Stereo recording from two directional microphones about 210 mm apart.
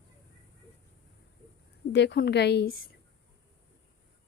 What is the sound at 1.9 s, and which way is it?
Speech, 50° left (ahead or behind).